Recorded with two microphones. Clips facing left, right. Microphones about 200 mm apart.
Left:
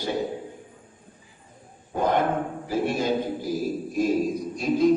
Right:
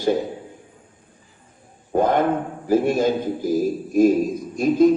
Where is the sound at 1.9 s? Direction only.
50° right (ahead or behind).